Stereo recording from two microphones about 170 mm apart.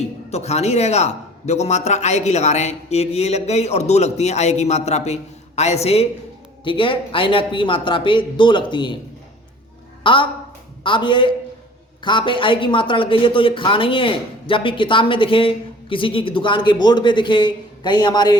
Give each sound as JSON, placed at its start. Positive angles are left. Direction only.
{"t": 0.0, "sound": "a man's voice", "side_deg": 40}
{"t": 10.0, "sound": "a woman's voice", "side_deg": 30}